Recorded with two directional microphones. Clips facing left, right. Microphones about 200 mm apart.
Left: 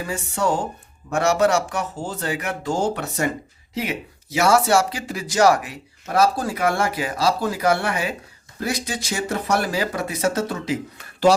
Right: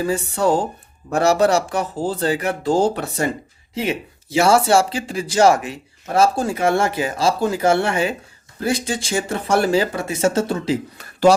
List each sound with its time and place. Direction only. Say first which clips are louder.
0.0 s speech: right 5 dB; 35° right (ahead or behind)